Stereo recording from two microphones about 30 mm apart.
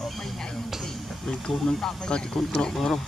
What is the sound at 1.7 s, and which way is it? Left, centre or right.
Speech, centre.